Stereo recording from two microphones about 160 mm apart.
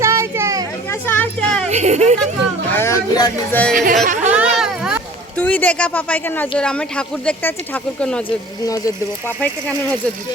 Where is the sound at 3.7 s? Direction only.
55° right (ahead or behind).